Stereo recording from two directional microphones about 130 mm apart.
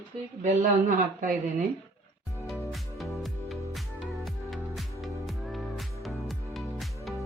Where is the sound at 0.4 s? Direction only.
90° right.